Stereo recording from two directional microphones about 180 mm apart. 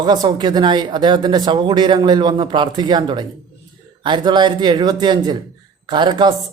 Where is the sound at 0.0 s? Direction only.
25° right (ahead or behind).